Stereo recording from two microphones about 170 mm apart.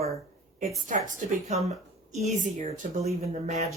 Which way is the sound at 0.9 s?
50° right (ahead or behind).